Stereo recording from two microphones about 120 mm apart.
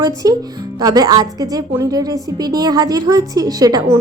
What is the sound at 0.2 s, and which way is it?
A woman's voice, 30° right (ahead or behind).